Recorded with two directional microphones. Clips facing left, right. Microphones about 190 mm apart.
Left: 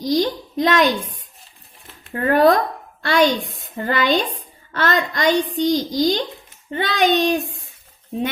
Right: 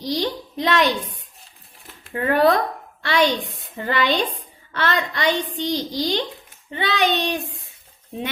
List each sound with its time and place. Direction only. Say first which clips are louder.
0.0 s a child's voice: left 5 dB; 45° left (ahead or behind)
2.1 s a woman's voice: left 3 dB; 45° left (ahead or behind)